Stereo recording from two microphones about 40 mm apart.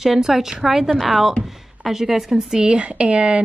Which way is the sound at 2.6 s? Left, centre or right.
Right.